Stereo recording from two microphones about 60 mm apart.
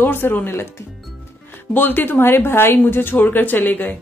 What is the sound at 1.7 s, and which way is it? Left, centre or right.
A woman's voice, left.